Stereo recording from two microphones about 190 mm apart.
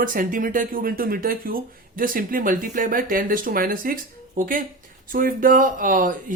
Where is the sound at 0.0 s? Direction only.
45° right (ahead or behind).